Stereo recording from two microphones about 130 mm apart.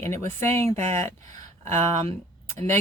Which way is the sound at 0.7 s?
60° right (ahead or behind).